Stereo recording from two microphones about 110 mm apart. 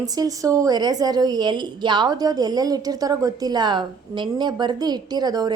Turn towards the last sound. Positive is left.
turn(degrees=-40)  # may be behind; listen again after turning